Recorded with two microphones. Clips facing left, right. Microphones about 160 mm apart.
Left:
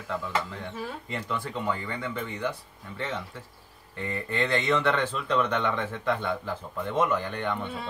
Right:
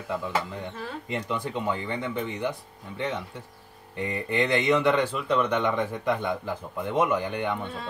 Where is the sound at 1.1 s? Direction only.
20° right (ahead or behind).